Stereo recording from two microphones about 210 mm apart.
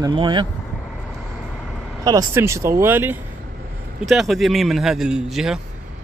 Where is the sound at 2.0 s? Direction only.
15° right (ahead or behind).